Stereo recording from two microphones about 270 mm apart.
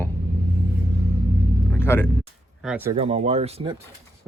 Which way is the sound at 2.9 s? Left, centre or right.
Right.